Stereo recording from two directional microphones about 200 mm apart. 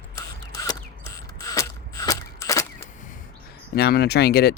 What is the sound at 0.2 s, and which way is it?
Mechanisms, 15° left (ahead or behind).